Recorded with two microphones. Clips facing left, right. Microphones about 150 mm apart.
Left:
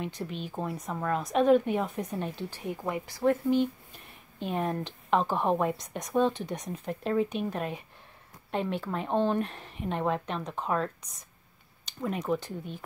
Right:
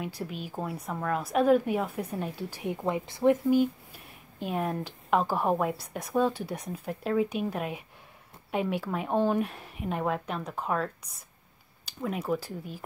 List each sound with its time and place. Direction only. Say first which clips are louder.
0.0 s speech: even; 5° right (ahead or behind)
3.4 s speech: right 2 dB; 5° right (ahead or behind)